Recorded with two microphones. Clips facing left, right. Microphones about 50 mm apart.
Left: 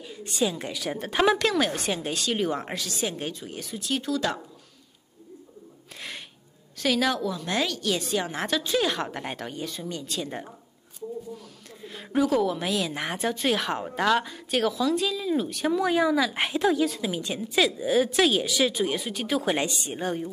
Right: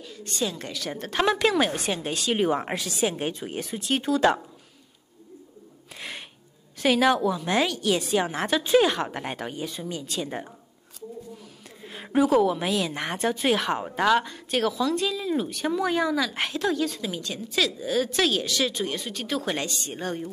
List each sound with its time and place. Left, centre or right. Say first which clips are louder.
0.0 s speech: left 2 dB; centre
1.4 s a woman's voice: right 2 dB; centre
2.3 s a woman's voice: right 6 dB; centre
3.3 s speech: right 4 dB; right
5.9 s a sound: right 1 dB; centre
6.8 s a woman's voice: right 4 dB; centre
8.5 s speech: right 7 dB; right
8.8 s a woman's voice: right 3 dB; centre
11.8 s a woman's voice: right 2 dB; centre
17.2 s speech: left 2 dB; centre